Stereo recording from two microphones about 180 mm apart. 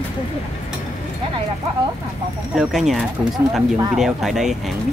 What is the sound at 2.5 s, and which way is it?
Speech, centre (ahead or behind).